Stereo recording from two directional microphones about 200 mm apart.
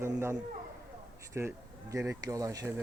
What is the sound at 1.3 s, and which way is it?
Speech, 15° right (ahead or behind).